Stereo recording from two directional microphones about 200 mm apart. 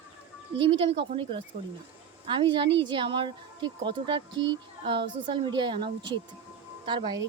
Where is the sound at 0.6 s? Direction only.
25° right (ahead or behind).